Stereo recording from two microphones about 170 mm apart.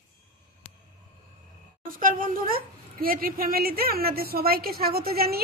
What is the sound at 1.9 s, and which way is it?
A woman's voice, 50° right (ahead or behind).